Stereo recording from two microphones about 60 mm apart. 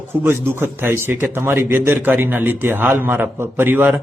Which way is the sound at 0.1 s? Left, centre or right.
Right.